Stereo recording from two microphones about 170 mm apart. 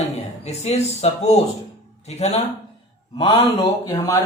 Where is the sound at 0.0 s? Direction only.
40° left (ahead or behind).